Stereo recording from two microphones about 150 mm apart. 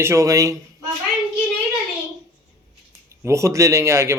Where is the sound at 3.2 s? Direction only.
20° right (ahead or behind).